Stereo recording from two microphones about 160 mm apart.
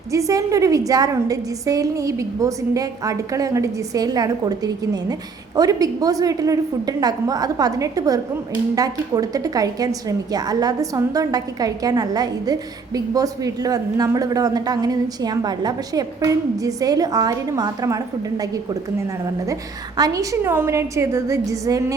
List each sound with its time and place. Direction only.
0.1 s a woman's voice: 20° right (ahead or behind)
20.0 s a woman's voice: 20° right (ahead or behind)